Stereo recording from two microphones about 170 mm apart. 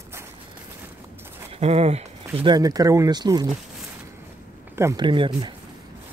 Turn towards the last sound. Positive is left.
turn(degrees=-25)  # may be behind; listen again after turning